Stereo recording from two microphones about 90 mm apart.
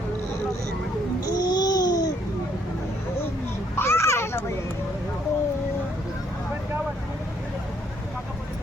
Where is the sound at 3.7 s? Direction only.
30° left (ahead or behind).